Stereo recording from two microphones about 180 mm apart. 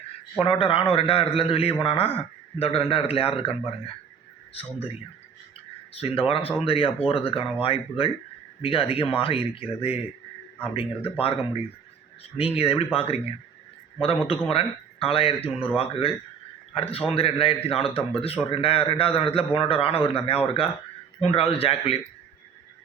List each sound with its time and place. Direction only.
0.3 s a man's voice: 30° left (ahead or behind)
4.6 s a man's voice: 35° left (ahead or behind)
5.9 s a man's voice: 35° left (ahead or behind)
12.4 s a man's voice: 30° left (ahead or behind)